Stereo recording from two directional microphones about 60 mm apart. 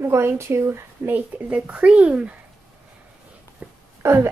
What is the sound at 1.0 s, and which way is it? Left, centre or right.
Speech, right.